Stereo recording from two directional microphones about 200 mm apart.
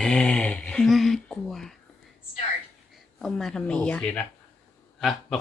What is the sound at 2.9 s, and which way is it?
Speech, centre (ahead or behind).